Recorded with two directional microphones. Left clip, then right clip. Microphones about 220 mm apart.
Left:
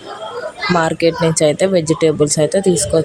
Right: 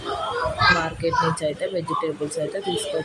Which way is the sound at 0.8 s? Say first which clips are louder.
Left 8 dB; 30° left (ahead or behind).